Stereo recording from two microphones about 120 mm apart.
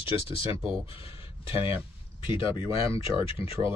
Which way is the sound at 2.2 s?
45° left (ahead or behind).